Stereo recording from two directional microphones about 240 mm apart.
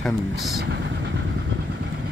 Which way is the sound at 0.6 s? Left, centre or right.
Right.